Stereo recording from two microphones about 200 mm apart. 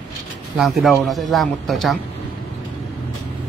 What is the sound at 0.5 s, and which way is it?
Speech, centre (ahead or behind).